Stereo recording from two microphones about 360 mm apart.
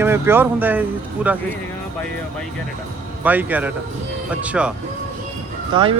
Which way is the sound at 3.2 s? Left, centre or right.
Centre.